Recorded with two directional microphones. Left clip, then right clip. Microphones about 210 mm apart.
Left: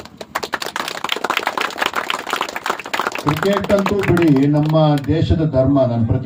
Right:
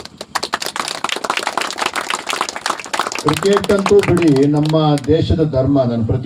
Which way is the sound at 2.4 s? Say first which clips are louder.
Right 1 dB; 40° left (ahead or behind).